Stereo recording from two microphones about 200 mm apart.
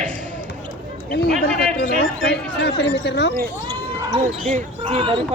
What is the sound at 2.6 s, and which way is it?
Speech, 60° left (ahead or behind).